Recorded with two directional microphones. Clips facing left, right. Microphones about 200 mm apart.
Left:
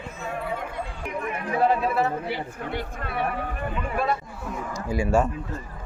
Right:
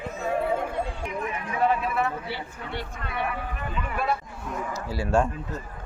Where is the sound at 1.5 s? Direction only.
35° left (ahead or behind).